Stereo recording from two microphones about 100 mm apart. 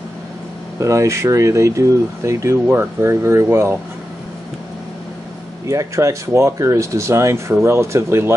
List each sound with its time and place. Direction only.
0.7 s speech: 30° right (ahead or behind)
5.7 s speech: 30° right (ahead or behind)